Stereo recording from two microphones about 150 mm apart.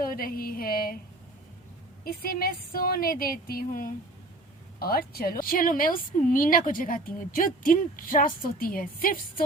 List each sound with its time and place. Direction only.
0.0 s a woman's voice: 75° left (ahead or behind)
2.0 s speech: 80° left
4.8 s a woman's voice: 85° left; by 9.1 s 70° left (ahead or behind)